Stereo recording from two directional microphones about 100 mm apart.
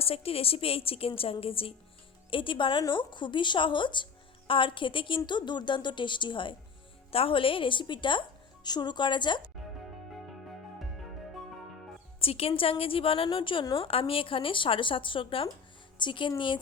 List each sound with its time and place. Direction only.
0.0 s a woman's voice: 75° left (ahead or behind); by 6.6 s 55° left (ahead or behind)
7.1 s a woman's voice: 70° left (ahead or behind); by 9.4 s 50° left (ahead or behind)
10.1 s music: centre (ahead or behind)
12.2 s speech: 75° left (ahead or behind); by 13.7 s 60° left (ahead or behind)
13.7 s a woman's voice: 70° left (ahead or behind); by 16.3 s 55° left (ahead or behind)